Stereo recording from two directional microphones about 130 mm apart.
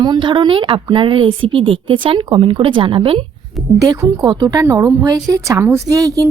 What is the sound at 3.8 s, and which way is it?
A woman's voice, 30° right (ahead or behind).